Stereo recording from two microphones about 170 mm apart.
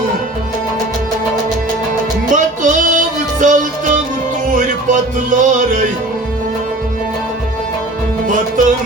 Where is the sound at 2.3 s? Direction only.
50° right (ahead or behind).